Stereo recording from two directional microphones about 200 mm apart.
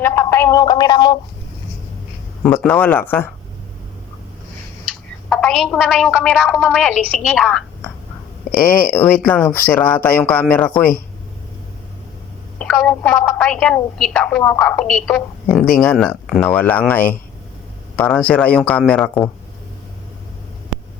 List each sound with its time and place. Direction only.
0.0 s speech: 10° left (ahead or behind)
2.4 s speech: 5° left (ahead or behind)
5.3 s a woman's voice: centre (ahead or behind)
8.9 s speech: 10° left (ahead or behind)
12.5 s a woman's voice: 5° left (ahead or behind)